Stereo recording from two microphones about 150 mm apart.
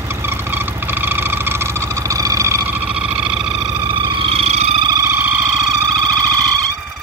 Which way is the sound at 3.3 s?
5° right (ahead or behind).